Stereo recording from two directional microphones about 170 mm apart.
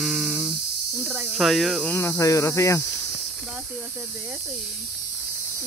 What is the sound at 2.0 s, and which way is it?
Speech, 15° left (ahead or behind).